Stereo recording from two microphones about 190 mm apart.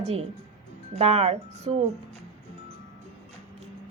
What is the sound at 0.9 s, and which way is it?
Speech, 35° right (ahead or behind).